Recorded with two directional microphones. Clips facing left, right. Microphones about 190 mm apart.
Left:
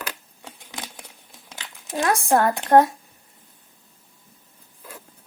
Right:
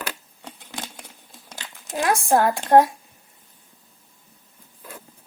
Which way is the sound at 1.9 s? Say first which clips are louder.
Even; 15° right (ahead or behind).